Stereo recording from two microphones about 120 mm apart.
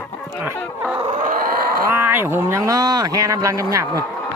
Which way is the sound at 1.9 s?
20° right (ahead or behind).